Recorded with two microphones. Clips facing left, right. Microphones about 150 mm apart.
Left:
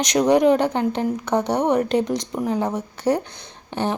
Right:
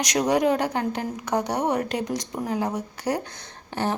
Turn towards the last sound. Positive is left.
turn(degrees=20)  # may be behind; listen again after turning